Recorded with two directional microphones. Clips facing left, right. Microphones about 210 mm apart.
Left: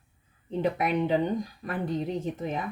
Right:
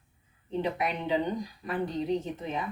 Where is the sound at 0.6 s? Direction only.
50° left (ahead or behind).